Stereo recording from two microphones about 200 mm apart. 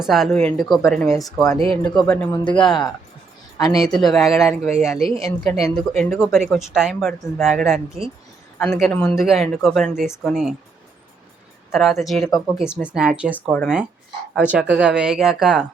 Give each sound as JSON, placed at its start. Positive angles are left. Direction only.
{"t": 0.0, "sound": "speech", "side_deg": 0}
{"t": 1.5, "sound": "speech", "side_deg": -25}
{"t": 1.8, "sound": "speech", "side_deg": 5}
{"t": 3.8, "sound": "speech", "side_deg": 0}
{"t": 11.7, "sound": "speech", "side_deg": 0}